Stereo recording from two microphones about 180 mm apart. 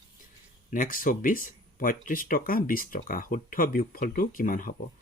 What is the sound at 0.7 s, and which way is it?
Speech, 50° left (ahead or behind).